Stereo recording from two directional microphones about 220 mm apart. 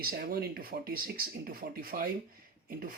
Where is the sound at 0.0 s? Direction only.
45° right (ahead or behind).